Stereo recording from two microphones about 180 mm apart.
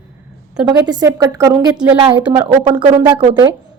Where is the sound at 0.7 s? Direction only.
20° right (ahead or behind).